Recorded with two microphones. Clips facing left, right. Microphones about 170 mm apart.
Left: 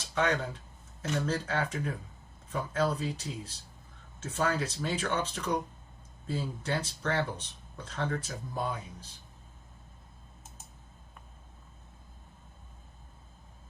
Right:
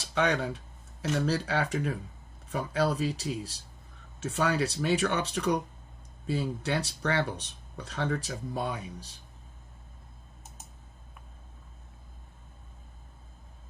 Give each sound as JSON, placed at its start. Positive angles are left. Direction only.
{"t": 0.1, "sound": "speech", "side_deg": -70}